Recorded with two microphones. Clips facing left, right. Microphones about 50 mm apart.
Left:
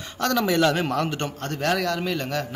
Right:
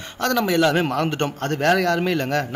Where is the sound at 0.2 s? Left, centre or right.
Right.